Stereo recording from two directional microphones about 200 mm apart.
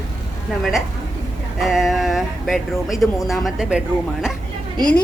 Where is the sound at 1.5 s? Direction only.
Centre (ahead or behind).